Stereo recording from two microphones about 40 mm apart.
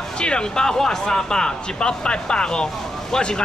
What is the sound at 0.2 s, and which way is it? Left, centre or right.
Speech, left.